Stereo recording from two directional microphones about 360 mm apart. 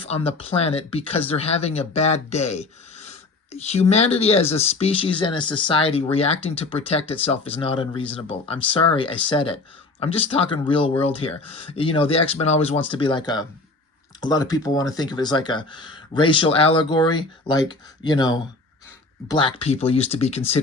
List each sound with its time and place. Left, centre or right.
0.0 s speech: centre